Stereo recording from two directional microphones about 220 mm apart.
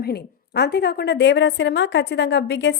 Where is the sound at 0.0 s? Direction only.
45° left (ahead or behind).